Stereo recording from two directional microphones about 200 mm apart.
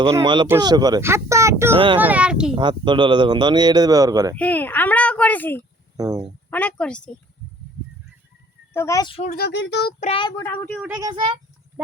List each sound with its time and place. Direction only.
0.0 s speech: 20° right (ahead or behind)
1.7 s speech: 25° right (ahead or behind)
2.0 s speech: 5° right (ahead or behind)
2.6 s speech: 25° right (ahead or behind)
4.4 s a child's voice: 10° left (ahead or behind)
6.0 s speech: 15° right (ahead or behind)
6.5 s speech: 5° left (ahead or behind)
8.7 s a child's voice: 15° left (ahead or behind)
9.2 s speech: 50° left (ahead or behind)
10.0 s a child's voice: 25° left (ahead or behind); by 10.8 s 10° left (ahead or behind)
10.8 s speech: 10° right (ahead or behind)